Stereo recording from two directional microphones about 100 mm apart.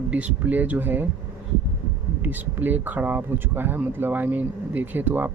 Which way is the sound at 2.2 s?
20° right (ahead or behind).